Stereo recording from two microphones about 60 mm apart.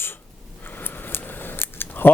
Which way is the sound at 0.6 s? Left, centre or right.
Left.